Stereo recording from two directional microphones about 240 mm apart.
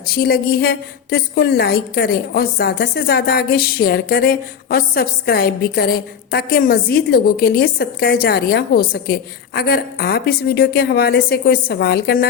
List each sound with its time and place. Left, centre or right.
0.0 s a woman's voice: left